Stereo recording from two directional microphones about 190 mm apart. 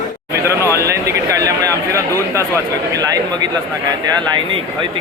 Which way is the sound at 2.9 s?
20° right (ahead or behind).